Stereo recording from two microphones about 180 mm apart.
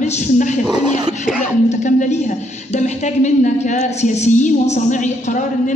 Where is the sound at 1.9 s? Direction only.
45° left (ahead or behind).